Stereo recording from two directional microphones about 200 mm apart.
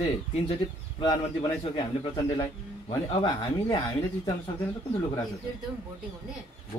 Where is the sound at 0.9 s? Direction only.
25° left (ahead or behind).